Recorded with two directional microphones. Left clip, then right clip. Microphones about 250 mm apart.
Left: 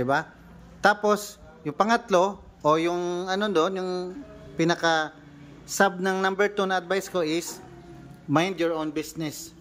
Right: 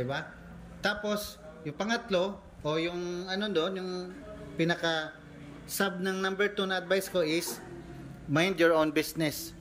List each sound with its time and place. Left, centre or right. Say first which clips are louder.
0.0 s a man's voice: left 10 dB; centre